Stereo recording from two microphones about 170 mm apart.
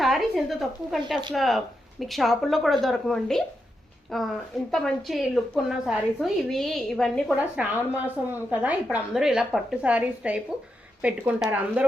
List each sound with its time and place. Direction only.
0.0 s a woman's voice: centre (ahead or behind)